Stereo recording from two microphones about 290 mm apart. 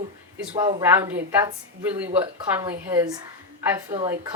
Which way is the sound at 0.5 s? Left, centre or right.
Right.